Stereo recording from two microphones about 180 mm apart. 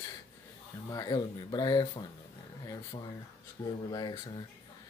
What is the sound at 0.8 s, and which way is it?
Speech, 20° left (ahead or behind).